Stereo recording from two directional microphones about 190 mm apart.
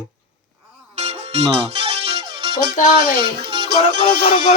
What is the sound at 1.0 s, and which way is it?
Music, 35° right (ahead or behind).